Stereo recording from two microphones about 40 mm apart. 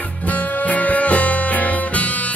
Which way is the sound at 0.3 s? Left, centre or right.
Left.